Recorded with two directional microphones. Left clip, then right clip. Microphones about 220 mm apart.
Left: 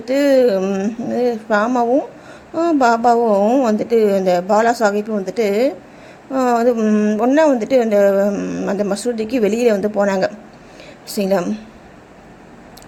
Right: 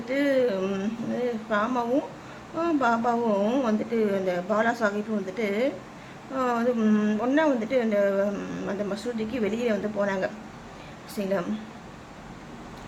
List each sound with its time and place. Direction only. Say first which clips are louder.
0.1 s speech: left 11 dB; 25° left (ahead or behind)
0.6 s a sound: left 9 dB; 15° left (ahead or behind)
2.6 s speech: left 10 dB; 25° left (ahead or behind)